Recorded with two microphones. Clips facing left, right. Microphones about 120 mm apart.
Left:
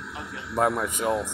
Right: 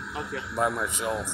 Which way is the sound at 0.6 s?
40° left (ahead or behind).